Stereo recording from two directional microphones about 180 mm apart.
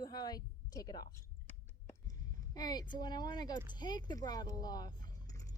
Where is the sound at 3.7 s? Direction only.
25° left (ahead or behind).